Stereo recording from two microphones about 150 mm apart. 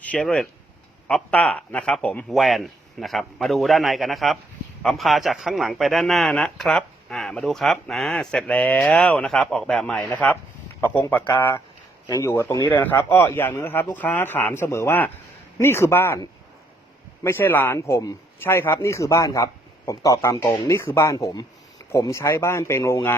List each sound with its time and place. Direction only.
0.0 s a man's voice: 5° left (ahead or behind)